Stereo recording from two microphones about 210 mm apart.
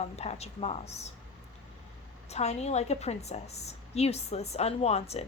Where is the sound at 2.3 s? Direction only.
30° left (ahead or behind).